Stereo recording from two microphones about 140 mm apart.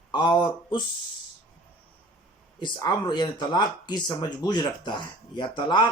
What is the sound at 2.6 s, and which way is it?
Speech, 30° left (ahead or behind).